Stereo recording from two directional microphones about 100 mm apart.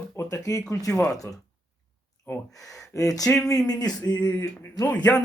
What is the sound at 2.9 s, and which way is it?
A man's voice, 30° left (ahead or behind).